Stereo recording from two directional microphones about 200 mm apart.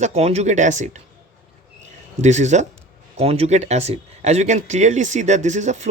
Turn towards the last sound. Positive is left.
turn(degrees=-35)  # may be behind; listen again after turning